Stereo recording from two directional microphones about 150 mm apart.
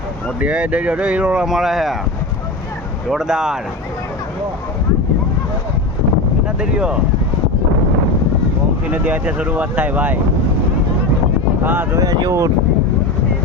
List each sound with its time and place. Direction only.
0.3 s speech: 5° right (ahead or behind)
3.1 s speech: 5° right (ahead or behind)
6.6 s speech: 5° right (ahead or behind)
8.9 s speech: 10° right (ahead or behind)
11.6 s speech: 15° right (ahead or behind)